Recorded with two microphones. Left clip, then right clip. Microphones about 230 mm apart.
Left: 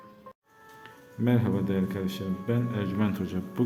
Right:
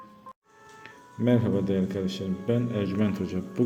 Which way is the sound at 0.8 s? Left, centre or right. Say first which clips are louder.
Right 2 dB; centre.